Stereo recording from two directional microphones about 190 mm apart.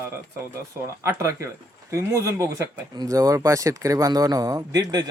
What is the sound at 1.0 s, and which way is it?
Speech, 15° right (ahead or behind).